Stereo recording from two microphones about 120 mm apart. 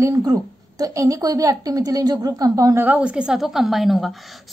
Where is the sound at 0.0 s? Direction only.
30° right (ahead or behind).